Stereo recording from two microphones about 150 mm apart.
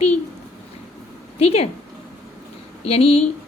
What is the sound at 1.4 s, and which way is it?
Speech, 45° left (ahead or behind).